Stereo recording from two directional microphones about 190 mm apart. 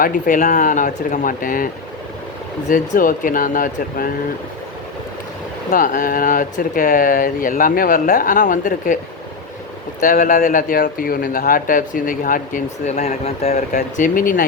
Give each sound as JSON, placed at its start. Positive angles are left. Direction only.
{"t": 0.0, "sound": "speech", "side_deg": 45}
{"t": 5.7, "sound": "speech", "side_deg": 45}
{"t": 10.0, "sound": "speech", "side_deg": 45}